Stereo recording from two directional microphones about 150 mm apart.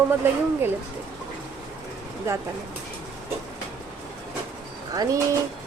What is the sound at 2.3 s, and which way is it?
Speech, 20° right (ahead or behind).